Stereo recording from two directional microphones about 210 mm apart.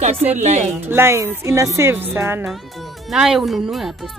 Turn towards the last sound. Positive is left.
turn(degrees=0)  # may be behind; listen again after turning